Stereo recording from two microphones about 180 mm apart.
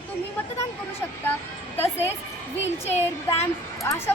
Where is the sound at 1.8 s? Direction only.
15° left (ahead or behind).